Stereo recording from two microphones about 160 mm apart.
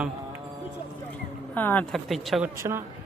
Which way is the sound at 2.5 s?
20° right (ahead or behind).